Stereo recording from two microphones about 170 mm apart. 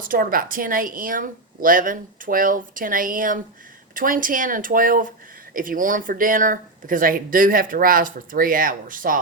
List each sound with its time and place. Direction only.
0.0 s a woman's voice: 55° right (ahead or behind)